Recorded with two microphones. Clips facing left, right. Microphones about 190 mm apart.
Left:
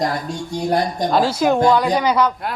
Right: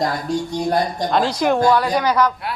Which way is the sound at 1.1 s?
5° left (ahead or behind).